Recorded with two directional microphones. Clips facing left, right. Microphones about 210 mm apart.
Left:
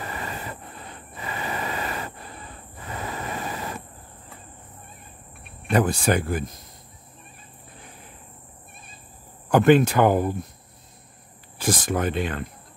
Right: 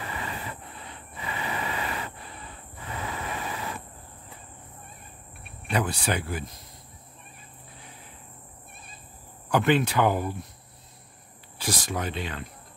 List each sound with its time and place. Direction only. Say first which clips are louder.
0.0 s a sound: left 2 dB; 45° left (ahead or behind)
2.9 s train: left 2 dB; 40° left (ahead or behind)
5.7 s speech: left 7 dB; 50° left (ahead or behind)
9.5 s speech: left 7 dB; 45° left (ahead or behind)
11.5 s speech: left 6 dB; 50° left (ahead or behind)